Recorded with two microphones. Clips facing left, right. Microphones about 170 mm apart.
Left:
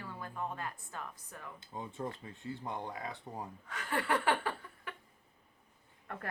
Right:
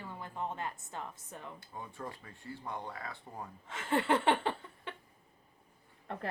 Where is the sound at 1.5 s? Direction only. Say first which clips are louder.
Left 3 dB; 20° left (ahead or behind).